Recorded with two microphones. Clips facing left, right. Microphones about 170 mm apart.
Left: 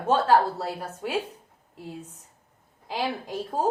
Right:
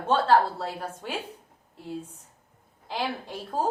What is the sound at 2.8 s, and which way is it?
Speech, 10° left (ahead or behind).